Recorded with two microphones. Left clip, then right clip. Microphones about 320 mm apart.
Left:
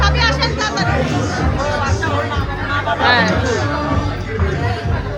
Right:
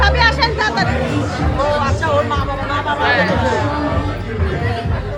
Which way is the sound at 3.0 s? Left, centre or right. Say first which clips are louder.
Left 2 dB; centre.